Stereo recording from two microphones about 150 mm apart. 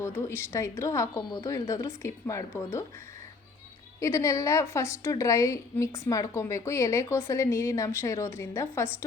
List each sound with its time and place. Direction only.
0.0 s a woman's voice: 20° left (ahead or behind)
4.0 s a woman's voice: 20° left (ahead or behind)